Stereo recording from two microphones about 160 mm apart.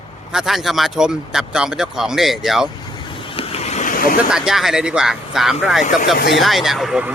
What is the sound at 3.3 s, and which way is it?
Vehicle, 35° left (ahead or behind).